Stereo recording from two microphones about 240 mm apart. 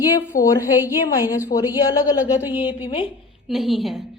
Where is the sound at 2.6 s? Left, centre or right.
Left.